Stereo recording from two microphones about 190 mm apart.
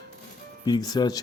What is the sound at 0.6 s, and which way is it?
Speech, 20° left (ahead or behind).